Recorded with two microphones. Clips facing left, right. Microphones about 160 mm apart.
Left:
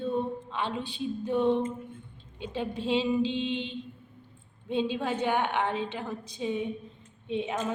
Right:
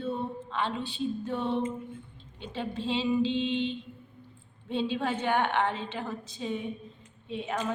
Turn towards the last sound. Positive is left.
turn(degrees=20)  # may be behind; listen again after turning